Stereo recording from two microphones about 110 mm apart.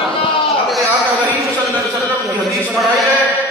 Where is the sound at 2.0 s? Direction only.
Centre (ahead or behind).